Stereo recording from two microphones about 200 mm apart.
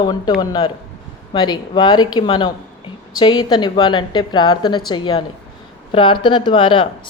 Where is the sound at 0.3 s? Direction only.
20° left (ahead or behind).